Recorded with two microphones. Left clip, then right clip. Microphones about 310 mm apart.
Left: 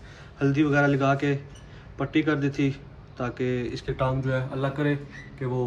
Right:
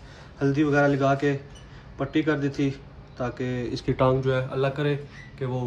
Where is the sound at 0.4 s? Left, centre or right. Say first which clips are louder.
Right 1 dB; centre.